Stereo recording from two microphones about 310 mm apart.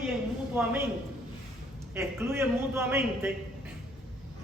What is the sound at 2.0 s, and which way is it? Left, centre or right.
Speech, centre.